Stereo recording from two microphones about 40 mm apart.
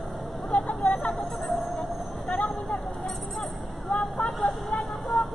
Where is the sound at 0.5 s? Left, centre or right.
Left.